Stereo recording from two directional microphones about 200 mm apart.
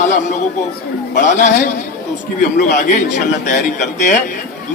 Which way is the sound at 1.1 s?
35° left (ahead or behind).